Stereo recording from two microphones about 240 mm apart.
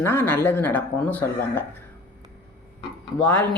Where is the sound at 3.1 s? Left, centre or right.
Centre.